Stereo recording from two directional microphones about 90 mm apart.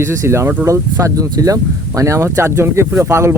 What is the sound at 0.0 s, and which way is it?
Speech, 30° right (ahead or behind).